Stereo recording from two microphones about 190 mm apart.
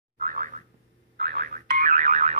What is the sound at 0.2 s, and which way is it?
Boing, 45° right (ahead or behind).